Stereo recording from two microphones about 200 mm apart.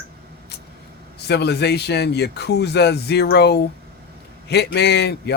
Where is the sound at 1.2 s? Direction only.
55° left (ahead or behind).